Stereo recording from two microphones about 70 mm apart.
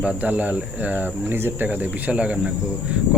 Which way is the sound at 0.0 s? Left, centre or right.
Centre.